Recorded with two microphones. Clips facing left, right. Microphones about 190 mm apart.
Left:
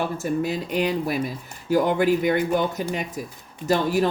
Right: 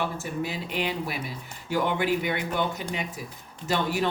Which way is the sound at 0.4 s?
45° left (ahead or behind).